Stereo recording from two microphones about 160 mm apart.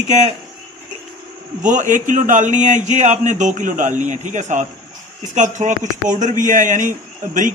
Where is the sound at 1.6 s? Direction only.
50° right (ahead or behind).